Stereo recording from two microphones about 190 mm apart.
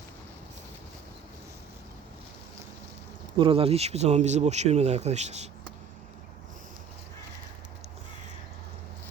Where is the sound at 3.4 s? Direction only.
30° right (ahead or behind).